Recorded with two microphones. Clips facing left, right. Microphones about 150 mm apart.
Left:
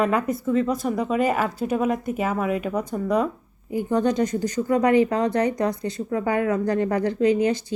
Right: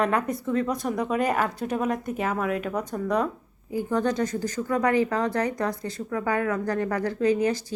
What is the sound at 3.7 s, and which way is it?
Speech, 20° left (ahead or behind).